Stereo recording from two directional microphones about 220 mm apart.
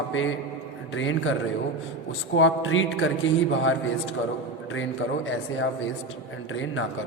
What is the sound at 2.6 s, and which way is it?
Speech, 60° left (ahead or behind).